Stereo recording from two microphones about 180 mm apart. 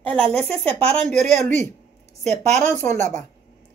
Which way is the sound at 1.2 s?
40° right (ahead or behind).